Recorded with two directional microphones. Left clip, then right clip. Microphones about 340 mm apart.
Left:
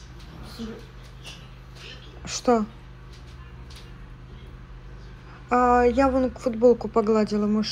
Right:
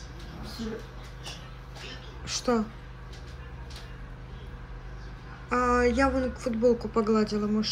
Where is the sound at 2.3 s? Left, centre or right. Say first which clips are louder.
Left 6 dB; centre.